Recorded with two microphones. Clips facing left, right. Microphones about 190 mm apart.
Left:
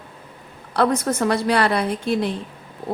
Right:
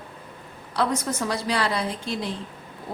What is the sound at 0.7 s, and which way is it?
A woman's voice, 60° left (ahead or behind).